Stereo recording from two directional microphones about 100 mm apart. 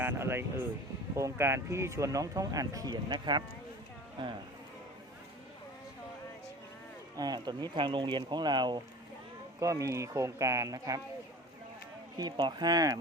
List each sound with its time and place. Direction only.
0.0 s speech: 20° right (ahead or behind); by 4.3 s 50° right (ahead or behind)
7.2 s speech: 45° right (ahead or behind)
9.6 s speech: 35° right (ahead or behind)
12.1 s speech: 45° right (ahead or behind)